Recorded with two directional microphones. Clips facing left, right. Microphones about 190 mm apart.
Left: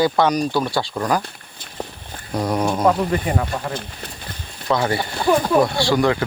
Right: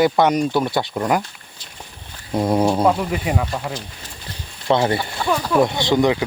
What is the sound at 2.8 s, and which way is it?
Speech, 10° right (ahead or behind).